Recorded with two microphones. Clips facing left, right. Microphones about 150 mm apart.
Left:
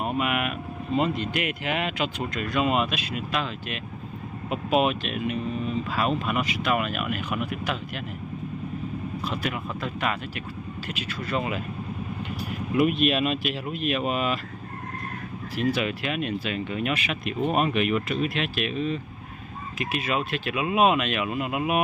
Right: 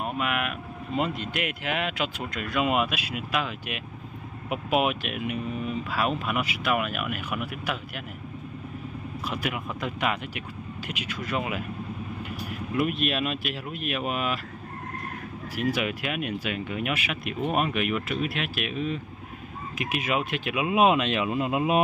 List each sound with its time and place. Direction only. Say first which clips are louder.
0.0 s speech: left 2 dB; 5° left (ahead or behind)
9.2 s speech: right 1 dB; 10° right (ahead or behind)
12.7 s speech: left 4 dB; centre (ahead or behind)
15.5 s speech: left 2 dB; 10° right (ahead or behind); by 21.8 s 25° right (ahead or behind)